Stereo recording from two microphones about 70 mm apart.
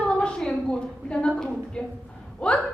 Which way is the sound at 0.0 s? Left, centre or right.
Centre.